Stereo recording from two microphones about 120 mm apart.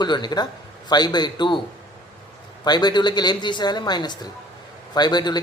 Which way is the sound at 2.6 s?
35° left (ahead or behind).